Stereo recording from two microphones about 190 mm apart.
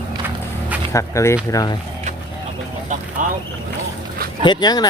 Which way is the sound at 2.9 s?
40° right (ahead or behind).